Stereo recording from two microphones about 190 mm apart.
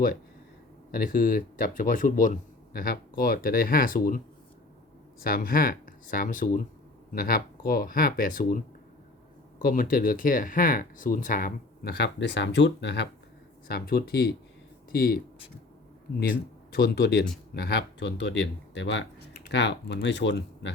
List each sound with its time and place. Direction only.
0.9 s speech: 50° left (ahead or behind)
5.2 s speech: 50° left (ahead or behind); by 13.1 s 65° left (ahead or behind)
13.7 s speech: 55° left (ahead or behind)
16.2 s speech: 55° left (ahead or behind); by 20.7 s 70° left (ahead or behind)